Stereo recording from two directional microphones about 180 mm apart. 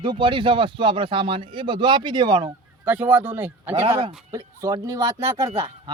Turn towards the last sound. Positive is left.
turn(degrees=-15)  # may be behind; listen again after turning